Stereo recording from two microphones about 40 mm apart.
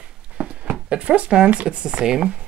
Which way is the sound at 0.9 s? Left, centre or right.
Right.